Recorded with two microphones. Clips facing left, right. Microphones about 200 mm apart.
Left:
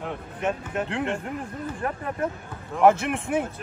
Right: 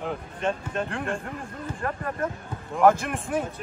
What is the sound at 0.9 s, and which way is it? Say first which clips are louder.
Speech: left 3 dB; 20° left (ahead or behind).